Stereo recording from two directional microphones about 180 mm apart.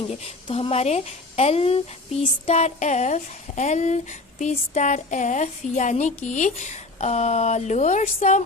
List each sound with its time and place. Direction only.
0.4 s speech: 30° left (ahead or behind)